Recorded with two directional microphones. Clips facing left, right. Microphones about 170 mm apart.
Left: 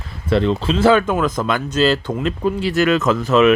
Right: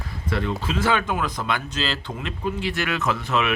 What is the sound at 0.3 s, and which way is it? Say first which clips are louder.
Speech: left 9 dB; 30° left (ahead or behind).